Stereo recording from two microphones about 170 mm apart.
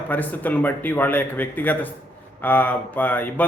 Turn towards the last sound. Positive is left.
turn(degrees=10)  # may be behind; listen again after turning